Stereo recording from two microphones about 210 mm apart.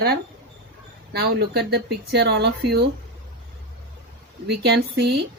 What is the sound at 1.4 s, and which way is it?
Speech, 50° right (ahead or behind).